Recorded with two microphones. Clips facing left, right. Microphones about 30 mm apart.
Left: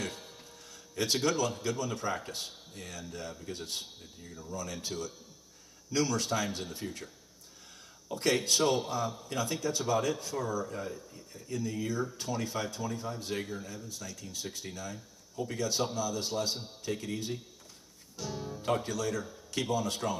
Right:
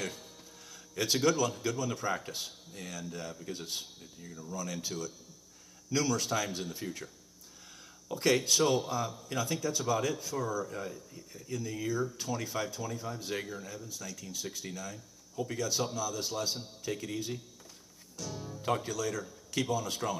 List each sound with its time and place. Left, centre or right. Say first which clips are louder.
0.0 s music: even; centre
0.9 s a man's voice: right 1 dB; centre
8.1 s a man's voice: right 1 dB; centre
18.1 s music: left 3 dB; centre
18.7 s a man's voice: left 1 dB; centre